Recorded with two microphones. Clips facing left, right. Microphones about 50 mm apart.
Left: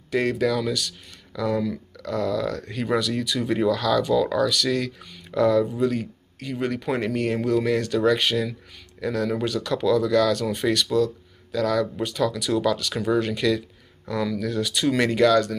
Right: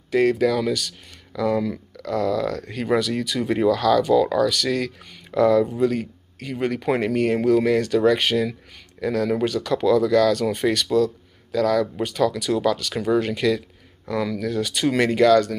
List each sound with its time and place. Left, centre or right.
0.2 s speech: right
3.3 s speech: right
3.7 s speech: right
9.0 s speech: centre
9.5 s speech: right
11.5 s speech: right
12.9 s speech: right
14.3 s speech: right
15.0 s speech: right